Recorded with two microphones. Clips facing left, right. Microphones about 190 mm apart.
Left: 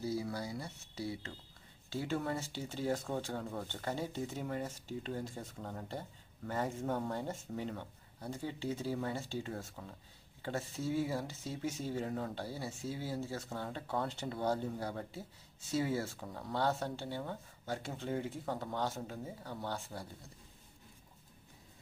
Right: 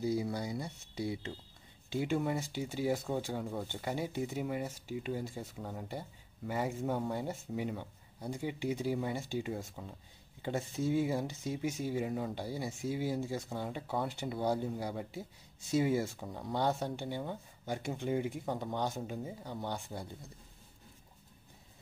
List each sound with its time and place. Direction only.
0.0 s speech: 15° right (ahead or behind)